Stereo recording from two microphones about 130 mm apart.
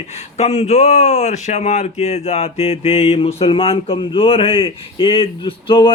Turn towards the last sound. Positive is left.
turn(degrees=40)  # may be behind; listen again after turning